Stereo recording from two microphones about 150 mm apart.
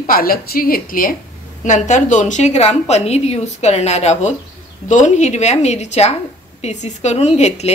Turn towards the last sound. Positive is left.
turn(degrees=45)  # may be behind; listen again after turning